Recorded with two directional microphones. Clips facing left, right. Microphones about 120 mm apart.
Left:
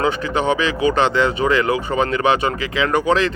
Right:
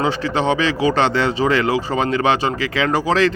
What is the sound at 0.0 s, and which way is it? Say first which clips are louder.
A man's voice: even; 30° right (ahead or behind).